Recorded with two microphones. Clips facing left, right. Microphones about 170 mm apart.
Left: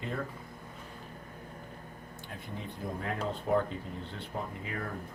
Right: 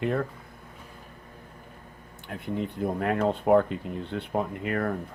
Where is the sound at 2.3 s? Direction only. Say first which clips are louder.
Right 11 dB; 65° right (ahead or behind).